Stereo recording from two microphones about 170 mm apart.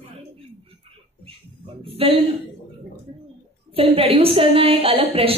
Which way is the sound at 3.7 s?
35° right (ahead or behind).